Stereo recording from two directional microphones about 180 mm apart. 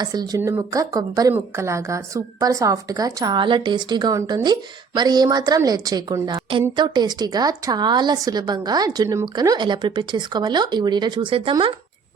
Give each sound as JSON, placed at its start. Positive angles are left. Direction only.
{"t": 0.0, "sound": "a woman's voice", "side_deg": -20}